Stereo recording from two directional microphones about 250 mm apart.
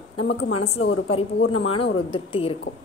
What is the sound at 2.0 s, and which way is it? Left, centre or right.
Speech, left.